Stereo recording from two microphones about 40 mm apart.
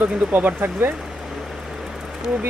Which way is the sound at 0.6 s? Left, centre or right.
Right.